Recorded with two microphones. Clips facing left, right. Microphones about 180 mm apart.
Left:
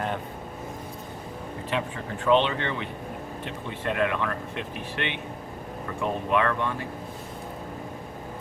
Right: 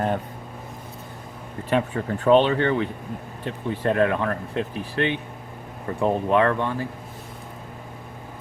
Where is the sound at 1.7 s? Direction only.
40° right (ahead or behind).